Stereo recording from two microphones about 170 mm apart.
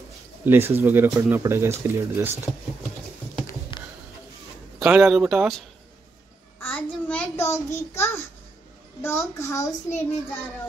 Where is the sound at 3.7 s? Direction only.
30° left (ahead or behind).